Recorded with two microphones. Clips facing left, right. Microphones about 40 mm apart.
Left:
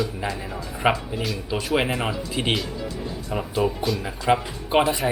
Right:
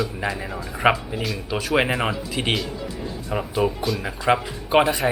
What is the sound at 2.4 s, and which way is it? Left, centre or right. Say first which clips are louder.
Speech: even; centre.